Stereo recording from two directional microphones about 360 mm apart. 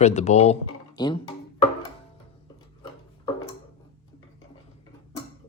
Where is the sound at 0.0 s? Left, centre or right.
Centre.